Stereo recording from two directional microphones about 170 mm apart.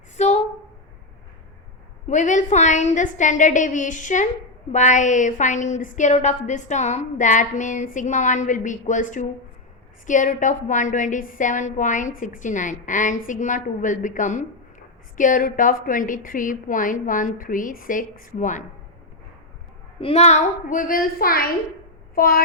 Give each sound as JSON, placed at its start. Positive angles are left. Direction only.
{"t": 0.2, "sound": "a sound", "side_deg": 40}
{"t": 2.0, "sound": "a woman's voice", "side_deg": 45}
{"t": 20.0, "sound": "a woman's voice", "side_deg": 40}